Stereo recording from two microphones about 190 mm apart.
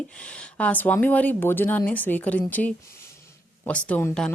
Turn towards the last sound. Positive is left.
turn(degrees=5)  # may be behind; listen again after turning